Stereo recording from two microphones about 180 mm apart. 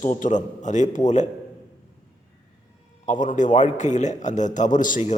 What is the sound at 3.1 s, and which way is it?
A man's voice, 45° left (ahead or behind).